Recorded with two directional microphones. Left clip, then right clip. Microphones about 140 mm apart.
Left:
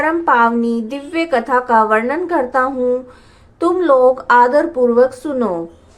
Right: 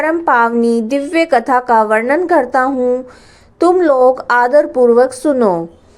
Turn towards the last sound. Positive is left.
turn(degrees=-40)  # may be behind; listen again after turning